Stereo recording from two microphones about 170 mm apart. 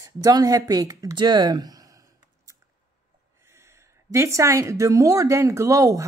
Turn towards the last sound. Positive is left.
turn(degrees=-20)  # may be behind; listen again after turning